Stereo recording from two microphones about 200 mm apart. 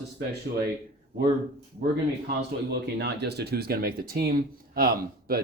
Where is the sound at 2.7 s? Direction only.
55° right (ahead or behind).